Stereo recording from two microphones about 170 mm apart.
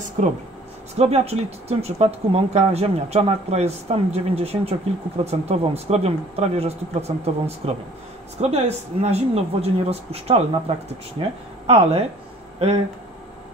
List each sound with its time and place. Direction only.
0.2 s speech: 50° right (ahead or behind)
0.9 s speech: 40° right (ahead or behind)